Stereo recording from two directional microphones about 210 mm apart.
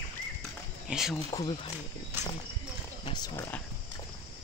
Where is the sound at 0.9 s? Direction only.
Centre (ahead or behind).